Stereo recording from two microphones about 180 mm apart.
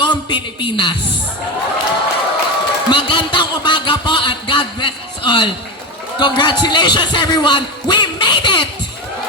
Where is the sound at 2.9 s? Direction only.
25° left (ahead or behind).